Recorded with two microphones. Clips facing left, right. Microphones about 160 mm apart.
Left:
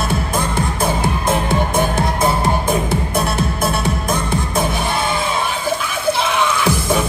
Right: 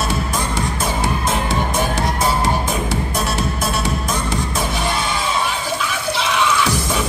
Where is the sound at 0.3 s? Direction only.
55° left (ahead or behind).